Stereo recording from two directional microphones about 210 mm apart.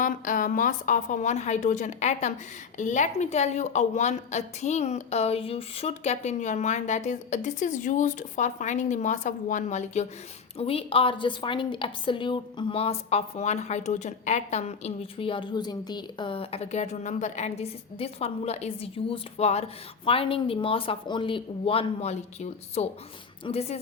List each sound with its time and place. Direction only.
0.0 s a woman's voice: 40° left (ahead or behind)